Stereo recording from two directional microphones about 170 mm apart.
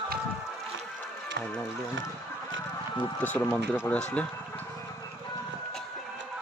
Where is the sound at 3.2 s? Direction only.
10° left (ahead or behind).